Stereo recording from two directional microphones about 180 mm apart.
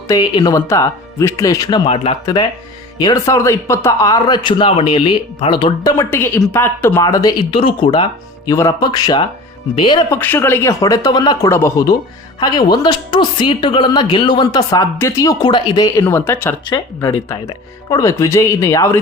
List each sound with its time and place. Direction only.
0.1 s speech: 25° left (ahead or behind)
10.1 s speech: 10° left (ahead or behind)